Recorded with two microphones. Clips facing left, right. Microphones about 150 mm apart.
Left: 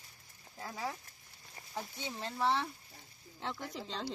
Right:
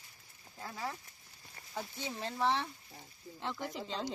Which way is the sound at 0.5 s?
5° left (ahead or behind).